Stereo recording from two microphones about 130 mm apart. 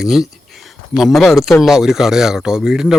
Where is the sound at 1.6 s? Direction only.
5° right (ahead or behind).